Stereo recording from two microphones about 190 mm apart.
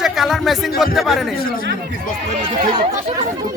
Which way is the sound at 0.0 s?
Centre (ahead or behind).